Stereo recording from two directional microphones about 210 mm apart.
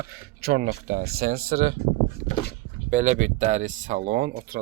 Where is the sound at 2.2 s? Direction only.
35° left (ahead or behind).